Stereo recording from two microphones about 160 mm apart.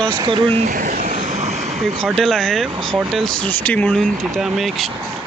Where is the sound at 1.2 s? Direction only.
45° right (ahead or behind).